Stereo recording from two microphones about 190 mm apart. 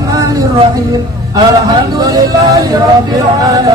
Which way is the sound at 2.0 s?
20° right (ahead or behind).